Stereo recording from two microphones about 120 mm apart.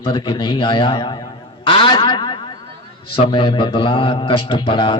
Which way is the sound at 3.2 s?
40° left (ahead or behind).